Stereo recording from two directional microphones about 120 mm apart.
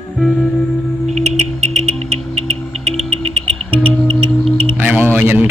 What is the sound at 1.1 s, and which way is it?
Music, 65° right (ahead or behind).